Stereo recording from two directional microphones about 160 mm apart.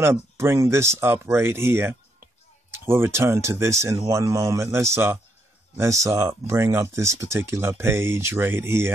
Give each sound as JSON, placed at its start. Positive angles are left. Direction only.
{"t": 0.0, "sound": "speech", "side_deg": -15}